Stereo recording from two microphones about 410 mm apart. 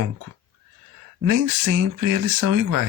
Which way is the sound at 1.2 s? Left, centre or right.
Right.